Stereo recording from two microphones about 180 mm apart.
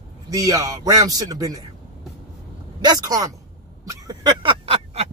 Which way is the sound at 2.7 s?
20° right (ahead or behind).